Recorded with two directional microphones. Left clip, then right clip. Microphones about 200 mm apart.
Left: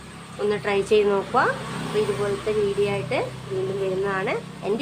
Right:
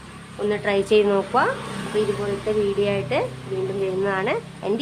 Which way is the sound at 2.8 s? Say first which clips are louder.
Right 2 dB; 30° right (ahead or behind).